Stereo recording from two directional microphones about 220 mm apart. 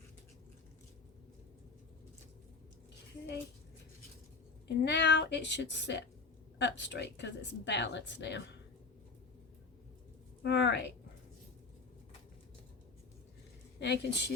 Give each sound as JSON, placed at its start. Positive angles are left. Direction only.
{"t": 4.9, "sound": "speech", "side_deg": 50}
{"t": 10.4, "sound": "speech", "side_deg": 50}
{"t": 13.7, "sound": "speech", "side_deg": 50}